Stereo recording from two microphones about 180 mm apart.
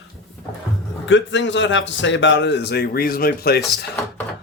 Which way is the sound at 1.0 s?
90° left.